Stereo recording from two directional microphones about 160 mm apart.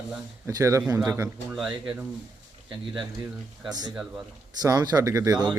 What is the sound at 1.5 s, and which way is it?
Speech, 5° right (ahead or behind).